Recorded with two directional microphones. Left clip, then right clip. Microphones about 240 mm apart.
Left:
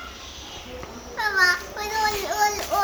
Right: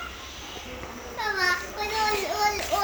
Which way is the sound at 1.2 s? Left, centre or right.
Left.